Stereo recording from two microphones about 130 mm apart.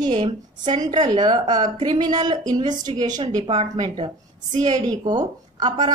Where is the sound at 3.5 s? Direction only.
50° right (ahead or behind).